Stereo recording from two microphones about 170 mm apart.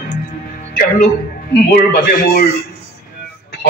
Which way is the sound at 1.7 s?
60° left (ahead or behind).